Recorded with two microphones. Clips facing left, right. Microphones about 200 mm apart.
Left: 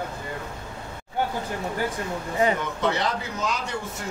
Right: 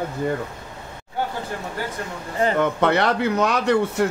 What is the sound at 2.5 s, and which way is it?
Speech, 60° right (ahead or behind).